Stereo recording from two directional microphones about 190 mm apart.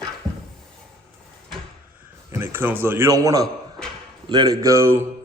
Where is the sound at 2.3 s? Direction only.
10° right (ahead or behind).